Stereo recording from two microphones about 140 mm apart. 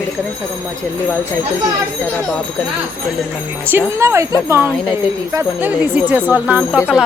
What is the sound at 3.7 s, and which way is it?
Speech, 20° right (ahead or behind).